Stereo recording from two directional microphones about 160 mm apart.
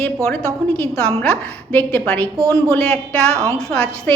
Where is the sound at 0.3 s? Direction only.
15° left (ahead or behind).